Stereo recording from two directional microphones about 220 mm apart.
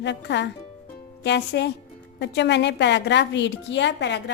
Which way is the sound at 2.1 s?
50° left (ahead or behind).